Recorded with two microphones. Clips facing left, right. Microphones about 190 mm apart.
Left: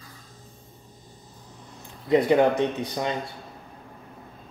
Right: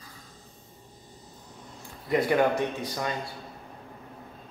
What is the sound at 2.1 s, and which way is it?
Speech, 20° left (ahead or behind).